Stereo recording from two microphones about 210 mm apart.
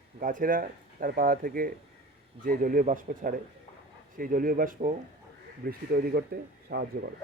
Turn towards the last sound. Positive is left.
turn(degrees=-50)  # may be behind; listen again after turning